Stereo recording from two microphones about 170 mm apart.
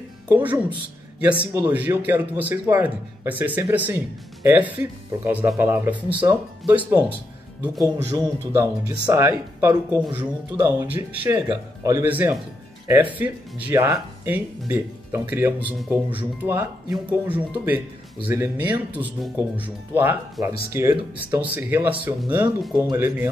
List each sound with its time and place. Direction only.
0.3 s a man's voice: 10° right (ahead or behind)
1.7 s a man's voice: 10° right (ahead or behind)
8.1 s a man's voice: 20° right (ahead or behind)